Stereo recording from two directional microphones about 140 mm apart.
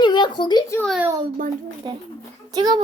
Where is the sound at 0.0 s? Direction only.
35° left (ahead or behind).